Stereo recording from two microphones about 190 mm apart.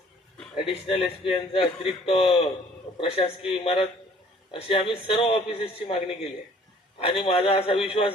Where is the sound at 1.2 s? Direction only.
30° left (ahead or behind).